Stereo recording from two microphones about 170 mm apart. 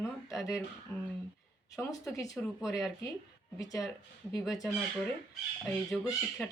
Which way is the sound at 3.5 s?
20° left (ahead or behind).